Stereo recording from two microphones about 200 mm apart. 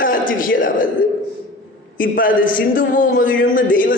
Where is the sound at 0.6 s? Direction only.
45° left (ahead or behind).